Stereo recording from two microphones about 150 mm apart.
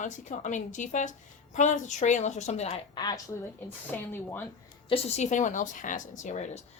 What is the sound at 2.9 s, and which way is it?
Speech, 30° left (ahead or behind).